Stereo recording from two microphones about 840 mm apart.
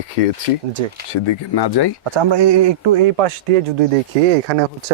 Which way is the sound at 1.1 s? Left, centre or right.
Left.